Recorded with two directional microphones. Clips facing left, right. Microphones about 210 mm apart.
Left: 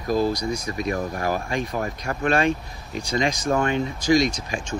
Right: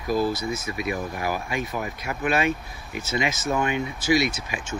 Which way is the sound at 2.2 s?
5° right (ahead or behind).